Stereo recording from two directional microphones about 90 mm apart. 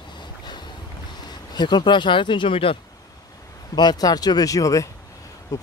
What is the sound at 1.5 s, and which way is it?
Speech, 55° left (ahead or behind).